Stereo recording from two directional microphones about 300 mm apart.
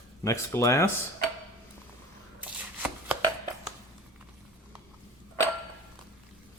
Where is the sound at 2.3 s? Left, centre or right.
Centre.